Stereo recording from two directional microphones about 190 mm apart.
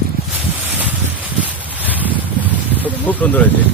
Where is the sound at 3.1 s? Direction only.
10° left (ahead or behind).